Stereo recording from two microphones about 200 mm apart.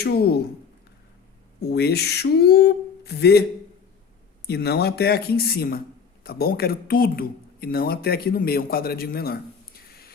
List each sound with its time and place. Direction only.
0.0 s speech: 50° left (ahead or behind)
1.7 s speech: 55° left (ahead or behind)
4.4 s speech: 55° left (ahead or behind)